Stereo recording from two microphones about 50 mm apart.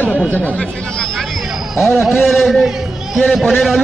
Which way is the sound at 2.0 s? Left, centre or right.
Centre.